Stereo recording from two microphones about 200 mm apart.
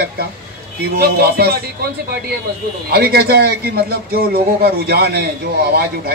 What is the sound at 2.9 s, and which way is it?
A man's voice, 50° right (ahead or behind).